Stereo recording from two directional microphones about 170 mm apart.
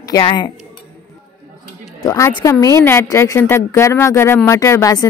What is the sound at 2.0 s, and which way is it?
Speech, 15° left (ahead or behind).